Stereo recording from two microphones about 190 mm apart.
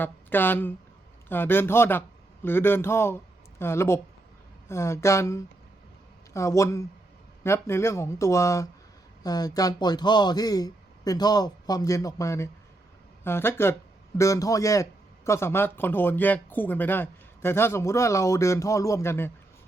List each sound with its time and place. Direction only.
0.0 s a man's voice: 10° left (ahead or behind)